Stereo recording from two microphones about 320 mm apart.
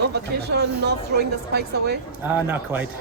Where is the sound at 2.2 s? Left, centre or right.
Centre.